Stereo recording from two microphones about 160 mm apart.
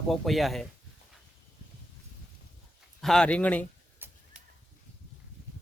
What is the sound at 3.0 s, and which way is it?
Speech, 5° left (ahead or behind).